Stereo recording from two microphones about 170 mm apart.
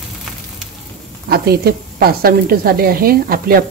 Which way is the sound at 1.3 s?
65° right (ahead or behind).